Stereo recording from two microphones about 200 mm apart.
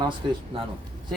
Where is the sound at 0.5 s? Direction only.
25° right (ahead or behind).